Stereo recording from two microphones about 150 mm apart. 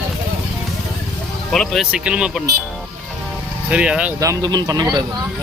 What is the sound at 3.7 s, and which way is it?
Speech, 5° right (ahead or behind).